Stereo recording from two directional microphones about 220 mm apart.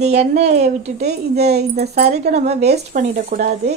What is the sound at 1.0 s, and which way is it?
Speech, 45° right (ahead or behind).